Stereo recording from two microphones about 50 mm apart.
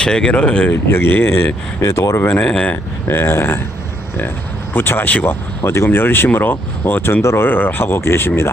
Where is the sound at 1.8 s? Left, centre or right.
Left.